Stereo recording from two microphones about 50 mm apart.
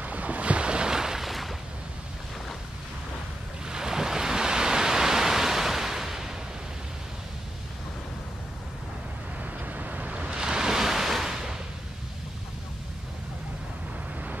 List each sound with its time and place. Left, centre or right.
0.0 s boat: right; by 1.5 s centre
3.6 s pink noise: centre
9.4 s waves: right; by 11.5 s centre